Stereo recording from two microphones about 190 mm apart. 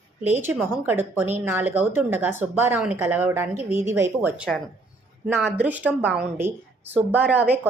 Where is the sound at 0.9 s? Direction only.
10° right (ahead or behind).